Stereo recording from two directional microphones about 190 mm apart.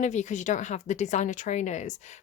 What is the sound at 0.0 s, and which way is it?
A woman's voice, 40° left (ahead or behind).